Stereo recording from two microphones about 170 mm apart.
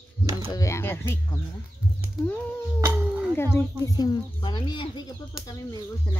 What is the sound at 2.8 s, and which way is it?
Howl, 15° right (ahead or behind).